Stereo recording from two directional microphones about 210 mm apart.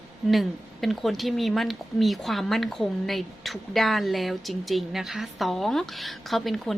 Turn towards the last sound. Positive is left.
turn(degrees=0)  # may be behind; listen again after turning